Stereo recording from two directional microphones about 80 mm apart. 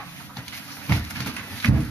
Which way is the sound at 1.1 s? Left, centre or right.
Centre.